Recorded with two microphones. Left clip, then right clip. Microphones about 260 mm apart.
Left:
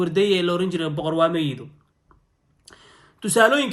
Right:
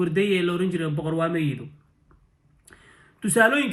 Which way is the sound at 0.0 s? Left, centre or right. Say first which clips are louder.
Left 3 dB; centre.